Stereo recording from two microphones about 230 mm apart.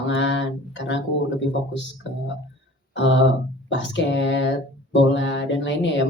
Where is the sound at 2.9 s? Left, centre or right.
Left.